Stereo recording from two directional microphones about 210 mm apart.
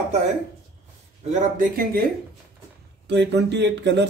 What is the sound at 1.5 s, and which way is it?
Speech, 45° right (ahead or behind).